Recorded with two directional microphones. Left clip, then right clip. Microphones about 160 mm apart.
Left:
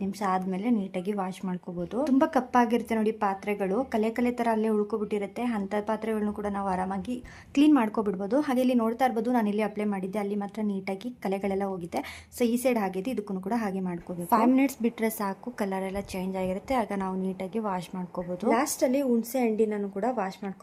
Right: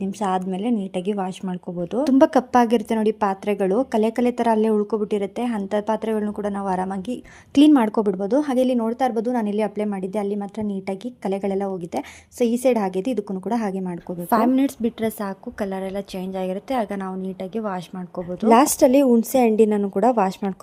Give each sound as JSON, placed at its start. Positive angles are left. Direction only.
{"t": 0.0, "sound": "a woman's voice", "side_deg": -25}
{"t": 18.4, "sound": "a woman's voice", "side_deg": -60}